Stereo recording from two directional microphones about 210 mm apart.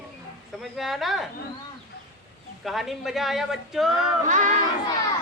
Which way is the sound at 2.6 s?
Centre (ahead or behind).